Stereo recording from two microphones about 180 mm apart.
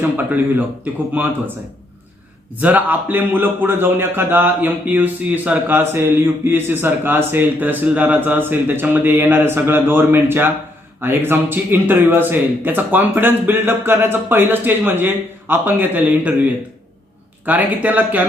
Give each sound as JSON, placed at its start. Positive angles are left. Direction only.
{"t": 1.1, "sound": "a man's voice", "side_deg": -10}
{"t": 2.6, "sound": "a man's voice", "side_deg": -10}
{"t": 17.4, "sound": "a man's voice", "side_deg": -10}